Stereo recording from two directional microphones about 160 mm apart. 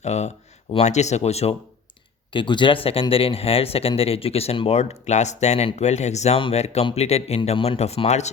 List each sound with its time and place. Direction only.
0.0 s speech: 45° left (ahead or behind)
2.3 s speech: 30° left (ahead or behind)